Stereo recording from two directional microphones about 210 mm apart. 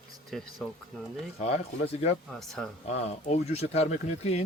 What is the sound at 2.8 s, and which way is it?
Speech, 30° left (ahead or behind).